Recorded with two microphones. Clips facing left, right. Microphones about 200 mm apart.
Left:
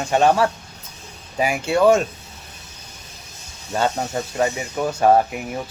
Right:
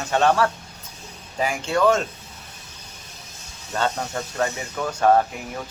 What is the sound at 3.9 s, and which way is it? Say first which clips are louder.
Speech: left 4 dB; 15° left (ahead or behind).